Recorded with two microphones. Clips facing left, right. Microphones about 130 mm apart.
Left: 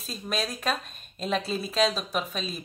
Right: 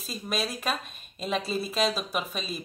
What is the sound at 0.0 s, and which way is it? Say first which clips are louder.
Speech: even; centre (ahead or behind).